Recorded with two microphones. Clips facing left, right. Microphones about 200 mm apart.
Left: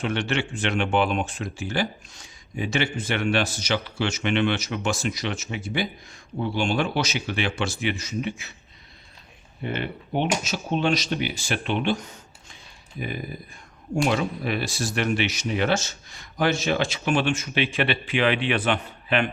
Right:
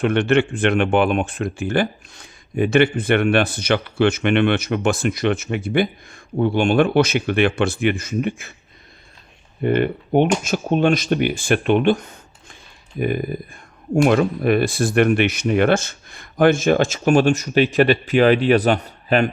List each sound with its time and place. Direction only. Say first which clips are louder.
0.0 s speech: right 9 dB; 55° right (ahead or behind)
9.6 s speech: right 11 dB; 50° right (ahead or behind)